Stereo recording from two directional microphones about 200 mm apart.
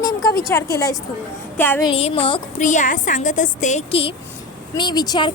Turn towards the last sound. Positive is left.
turn(degrees=20)  # may be behind; listen again after turning